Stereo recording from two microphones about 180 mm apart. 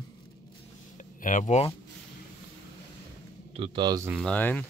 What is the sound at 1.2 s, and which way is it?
Speech, 45° left (ahead or behind).